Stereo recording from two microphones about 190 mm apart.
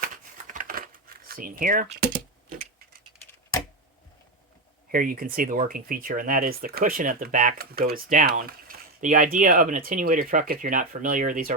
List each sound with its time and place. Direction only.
0.0 s a sound: 45° right (ahead or behind)
1.9 s typing: 60° right (ahead or behind)
4.9 s speech: 50° right (ahead or behind)